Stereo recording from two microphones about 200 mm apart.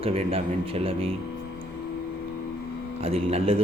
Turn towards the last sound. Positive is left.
turn(degrees=-30)  # may be behind; listen again after turning